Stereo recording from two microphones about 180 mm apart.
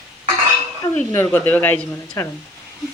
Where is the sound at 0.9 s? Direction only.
10° left (ahead or behind).